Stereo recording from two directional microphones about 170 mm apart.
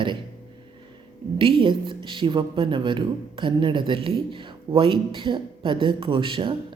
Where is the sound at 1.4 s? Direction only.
30° right (ahead or behind).